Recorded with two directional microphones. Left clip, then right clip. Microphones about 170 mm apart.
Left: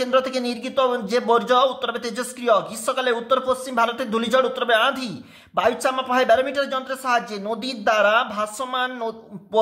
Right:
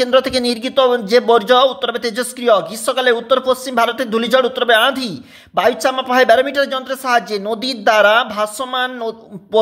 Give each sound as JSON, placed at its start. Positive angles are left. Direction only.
{"t": 0.0, "sound": "a man's voice", "side_deg": -35}